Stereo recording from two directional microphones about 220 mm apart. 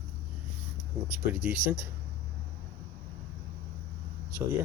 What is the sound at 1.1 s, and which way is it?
Speech, 5° right (ahead or behind).